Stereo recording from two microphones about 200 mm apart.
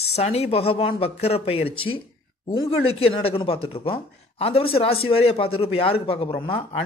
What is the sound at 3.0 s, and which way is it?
Speech, 30° left (ahead or behind).